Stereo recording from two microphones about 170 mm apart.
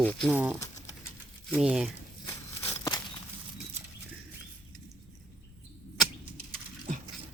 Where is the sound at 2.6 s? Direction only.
15° left (ahead or behind).